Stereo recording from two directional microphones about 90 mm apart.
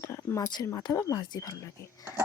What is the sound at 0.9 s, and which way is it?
Speech, 35° left (ahead or behind).